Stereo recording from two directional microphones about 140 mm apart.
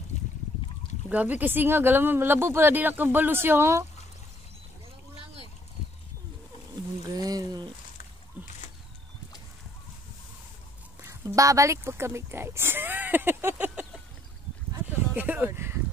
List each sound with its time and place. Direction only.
1.0 s speech: 10° right (ahead or behind)
7.2 s speech: 30° right (ahead or behind)
8.4 s boat: 10° right (ahead or behind)
11.3 s speech: 25° right (ahead or behind)
15.1 s speech: 15° right (ahead or behind)